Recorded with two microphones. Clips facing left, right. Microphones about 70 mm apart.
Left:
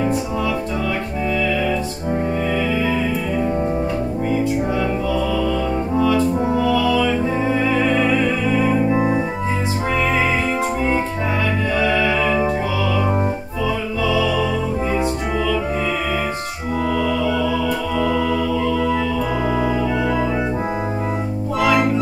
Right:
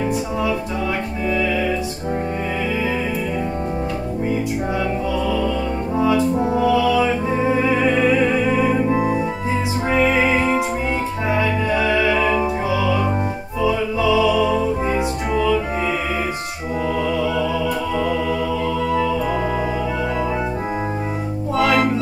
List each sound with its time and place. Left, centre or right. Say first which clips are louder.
5.9 s music: even; centre
11.8 s music: even; centre
17.9 s music: left 3 dB; centre